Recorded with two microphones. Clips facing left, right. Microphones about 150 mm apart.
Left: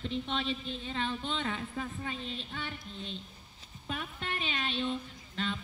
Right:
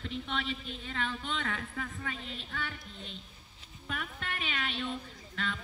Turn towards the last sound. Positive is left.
turn(degrees=30)  # may be behind; listen again after turning